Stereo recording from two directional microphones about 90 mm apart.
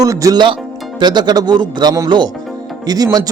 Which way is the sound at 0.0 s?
40° right (ahead or behind).